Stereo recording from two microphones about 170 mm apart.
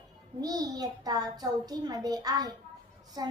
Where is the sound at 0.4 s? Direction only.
20° right (ahead or behind).